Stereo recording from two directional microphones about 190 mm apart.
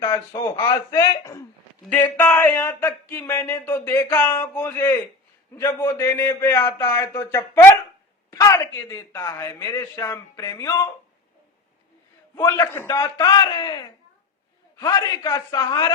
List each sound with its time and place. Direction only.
0.0 s a man's voice: 20° left (ahead or behind)
12.4 s a man's voice: 20° left (ahead or behind)